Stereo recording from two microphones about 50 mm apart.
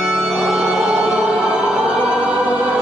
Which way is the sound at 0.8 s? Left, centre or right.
Centre.